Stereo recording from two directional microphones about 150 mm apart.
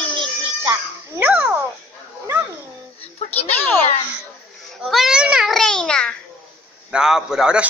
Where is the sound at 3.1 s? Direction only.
45° left (ahead or behind).